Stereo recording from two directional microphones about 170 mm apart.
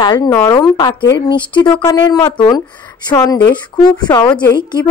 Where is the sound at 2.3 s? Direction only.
30° left (ahead or behind).